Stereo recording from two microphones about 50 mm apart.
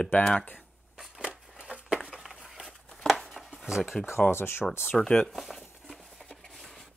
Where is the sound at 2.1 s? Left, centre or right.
Centre.